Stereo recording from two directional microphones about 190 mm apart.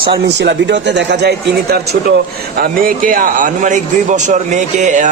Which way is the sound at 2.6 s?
50° right (ahead or behind).